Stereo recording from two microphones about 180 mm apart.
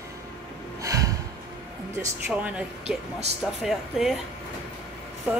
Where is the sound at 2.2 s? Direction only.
5° right (ahead or behind).